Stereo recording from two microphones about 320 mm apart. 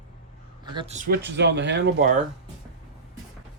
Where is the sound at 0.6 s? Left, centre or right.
Centre.